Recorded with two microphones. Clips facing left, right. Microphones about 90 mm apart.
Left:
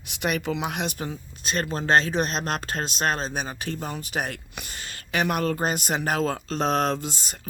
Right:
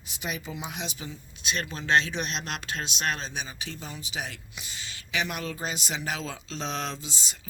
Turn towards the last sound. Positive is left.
turn(degrees=55)  # may be behind; listen again after turning